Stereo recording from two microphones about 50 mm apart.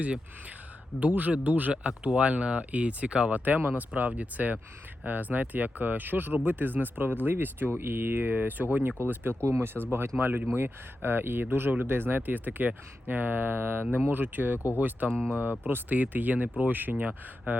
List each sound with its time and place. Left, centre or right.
0.9 s speech: right
9.0 s speech: right
9.4 s speech: right
9.8 s speech: right